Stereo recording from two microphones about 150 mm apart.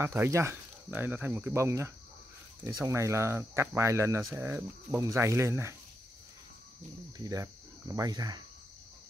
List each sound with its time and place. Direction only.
0.0 s speech: 15° right (ahead or behind)
7.9 s speech: 25° right (ahead or behind)